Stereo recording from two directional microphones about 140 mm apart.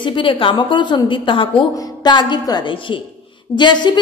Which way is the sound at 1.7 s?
30° left (ahead or behind).